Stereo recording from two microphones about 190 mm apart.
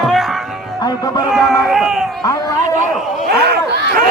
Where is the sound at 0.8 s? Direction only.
20° left (ahead or behind).